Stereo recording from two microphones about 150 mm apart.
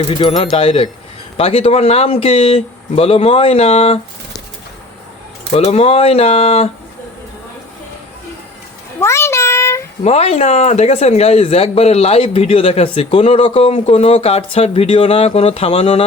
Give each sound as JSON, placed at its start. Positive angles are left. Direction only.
{"t": 0.1, "sound": "speech", "side_deg": 35}
{"t": 5.5, "sound": "speech", "side_deg": 45}
{"t": 9.0, "sound": "a sound", "side_deg": 15}
{"t": 10.0, "sound": "speech", "side_deg": 45}